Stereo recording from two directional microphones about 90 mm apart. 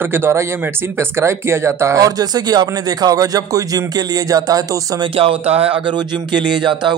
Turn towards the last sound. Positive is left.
turn(degrees=-60)  # may be behind; listen again after turning